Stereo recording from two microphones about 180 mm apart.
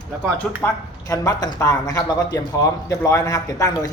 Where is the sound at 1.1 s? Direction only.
20° left (ahead or behind).